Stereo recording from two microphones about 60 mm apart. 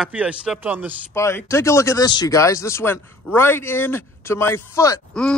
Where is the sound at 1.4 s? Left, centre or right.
Left.